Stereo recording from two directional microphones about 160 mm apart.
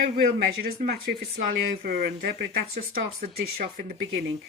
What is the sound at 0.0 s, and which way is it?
Speech, 75° right (ahead or behind).